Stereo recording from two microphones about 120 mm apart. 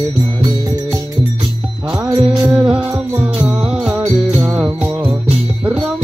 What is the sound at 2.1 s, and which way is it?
Music, 45° right (ahead or behind).